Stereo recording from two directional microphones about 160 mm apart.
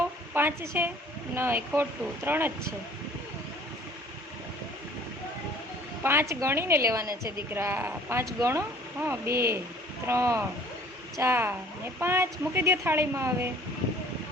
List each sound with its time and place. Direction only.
0.3 s a woman's voice: 15° right (ahead or behind)
6.0 s a woman's voice: 15° right (ahead or behind)